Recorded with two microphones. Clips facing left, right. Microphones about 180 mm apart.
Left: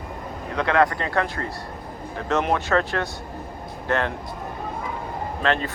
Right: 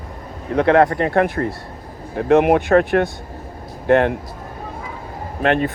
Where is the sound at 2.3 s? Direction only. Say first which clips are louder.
Right 9 dB; 55° right (ahead or behind).